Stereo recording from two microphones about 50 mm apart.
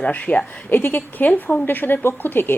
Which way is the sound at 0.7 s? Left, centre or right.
Left.